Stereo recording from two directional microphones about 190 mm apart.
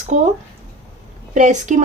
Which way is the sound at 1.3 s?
40° right (ahead or behind).